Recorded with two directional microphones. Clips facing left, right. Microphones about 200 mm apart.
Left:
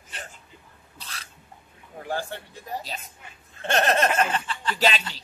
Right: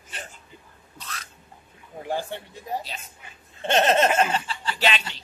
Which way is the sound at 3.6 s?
25° right (ahead or behind).